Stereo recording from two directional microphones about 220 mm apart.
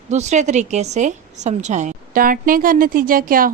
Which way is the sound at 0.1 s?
30° right (ahead or behind).